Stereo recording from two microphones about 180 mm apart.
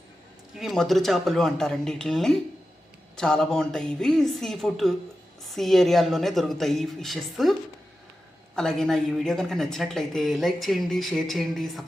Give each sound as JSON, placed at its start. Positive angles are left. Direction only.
{"t": 0.5, "sound": "a woman's voice", "side_deg": 0}
{"t": 8.5, "sound": "a woman's voice", "side_deg": 0}